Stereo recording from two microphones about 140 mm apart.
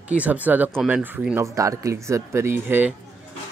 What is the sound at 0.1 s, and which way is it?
Speech, 10° right (ahead or behind).